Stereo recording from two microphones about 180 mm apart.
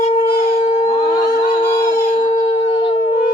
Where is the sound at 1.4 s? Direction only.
35° left (ahead or behind).